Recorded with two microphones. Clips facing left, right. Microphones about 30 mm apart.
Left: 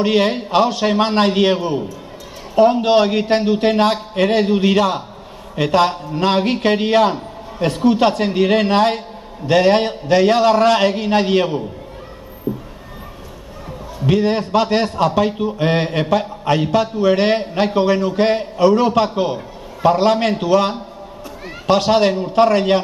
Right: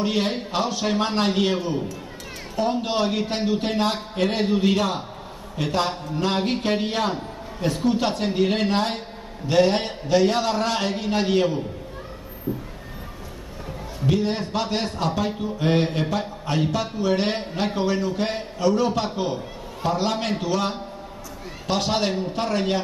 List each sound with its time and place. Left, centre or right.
0.0 s a man's voice: left
12.5 s a sound: left
14.0 s a man's voice: left
15.0 s a man's voice: left
22.3 s speech: left